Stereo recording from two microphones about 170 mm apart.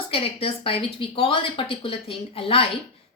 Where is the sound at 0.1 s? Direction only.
35° left (ahead or behind).